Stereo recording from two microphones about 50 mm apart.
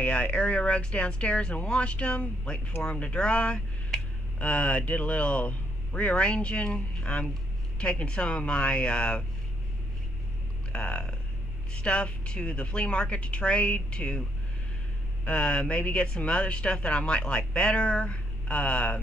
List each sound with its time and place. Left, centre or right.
0.0 s speech: left
10.7 s speech: left
15.2 s speech: left